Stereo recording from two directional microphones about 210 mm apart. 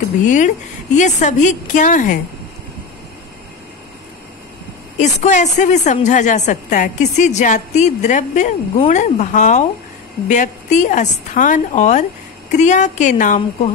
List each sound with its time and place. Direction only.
0.2 s a woman's voice: 35° left (ahead or behind)
4.9 s a woman's voice: 35° left (ahead or behind)